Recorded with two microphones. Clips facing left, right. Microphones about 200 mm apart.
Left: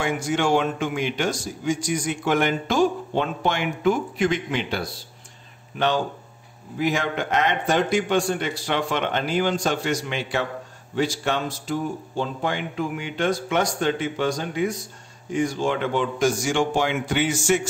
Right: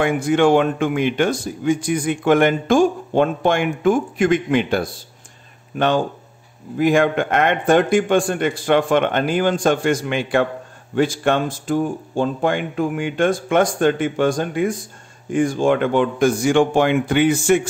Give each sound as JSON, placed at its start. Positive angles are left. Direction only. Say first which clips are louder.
{"t": 0.0, "sound": "speech", "louder": "right 7 dB", "side_deg": -55}